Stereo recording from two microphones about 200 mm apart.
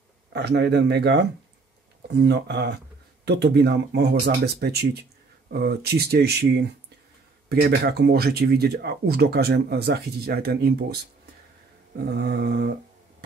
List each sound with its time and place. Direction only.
0.3 s speech: 55° right (ahead or behind)
12.0 s speech: 55° right (ahead or behind)